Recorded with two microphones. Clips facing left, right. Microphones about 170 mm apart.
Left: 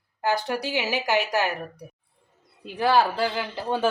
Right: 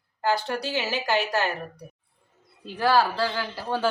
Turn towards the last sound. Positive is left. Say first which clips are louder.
# left 2 dB
turn(degrees=20)  # may be behind; listen again after turning